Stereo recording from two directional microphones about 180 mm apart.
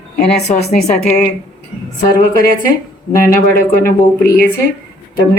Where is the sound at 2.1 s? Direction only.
55° left (ahead or behind).